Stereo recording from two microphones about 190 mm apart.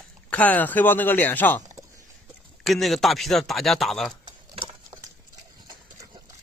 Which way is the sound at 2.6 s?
Centre (ahead or behind).